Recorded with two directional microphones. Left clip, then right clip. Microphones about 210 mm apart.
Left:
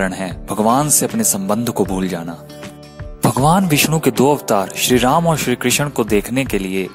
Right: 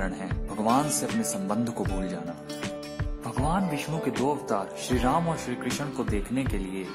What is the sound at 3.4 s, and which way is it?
Speech, 45° left (ahead or behind).